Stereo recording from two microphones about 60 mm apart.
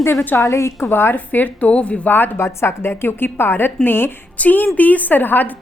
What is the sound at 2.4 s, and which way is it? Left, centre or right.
A woman's voice, left.